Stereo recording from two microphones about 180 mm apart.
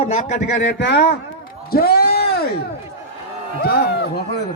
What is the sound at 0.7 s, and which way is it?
Speech, 75° left (ahead or behind).